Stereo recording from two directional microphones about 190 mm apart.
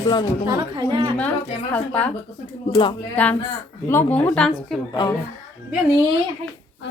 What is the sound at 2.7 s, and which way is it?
Speech, 25° left (ahead or behind).